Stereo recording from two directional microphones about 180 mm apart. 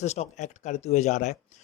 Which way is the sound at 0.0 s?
40° left (ahead or behind).